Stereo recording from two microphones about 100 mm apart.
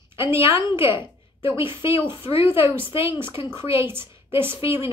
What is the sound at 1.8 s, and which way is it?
A woman's voice, 25° right (ahead or behind).